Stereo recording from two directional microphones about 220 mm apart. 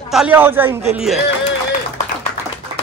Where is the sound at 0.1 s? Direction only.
5° right (ahead or behind).